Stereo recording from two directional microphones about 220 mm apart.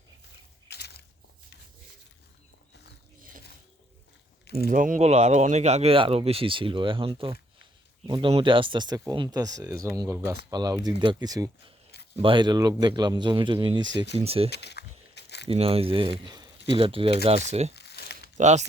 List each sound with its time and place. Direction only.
0.7 s crushing: 50° left (ahead or behind)
4.4 s speech: 45° left (ahead or behind)
4.7 s speech: 35° right (ahead or behind); by 11.4 s 15° right (ahead or behind)
11.9 s a sound: 50° left (ahead or behind)
12.2 s speech: 20° right (ahead or behind)
14.5 s a sound: 50° left (ahead or behind)
15.4 s speech: 25° right (ahead or behind)
17.7 s crumpling: 50° left (ahead or behind)
18.3 s speech: 30° right (ahead or behind)